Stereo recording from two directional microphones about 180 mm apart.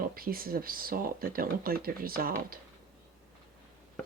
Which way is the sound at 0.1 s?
55° right (ahead or behind).